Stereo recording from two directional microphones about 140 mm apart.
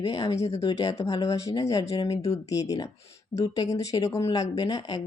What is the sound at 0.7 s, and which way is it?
Speech, 20° left (ahead or behind).